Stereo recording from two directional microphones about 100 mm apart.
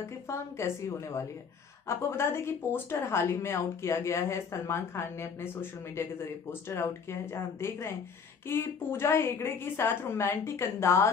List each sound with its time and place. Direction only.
0.0 s a woman's voice: 25° left (ahead or behind)